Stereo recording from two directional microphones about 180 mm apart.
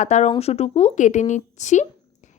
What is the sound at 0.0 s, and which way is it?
A woman's voice, 40° left (ahead or behind).